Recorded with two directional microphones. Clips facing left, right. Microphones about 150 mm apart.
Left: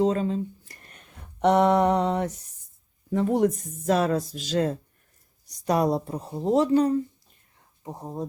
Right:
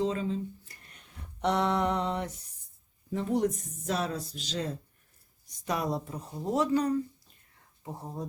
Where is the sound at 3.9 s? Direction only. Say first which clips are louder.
Left 9 dB; 90° left.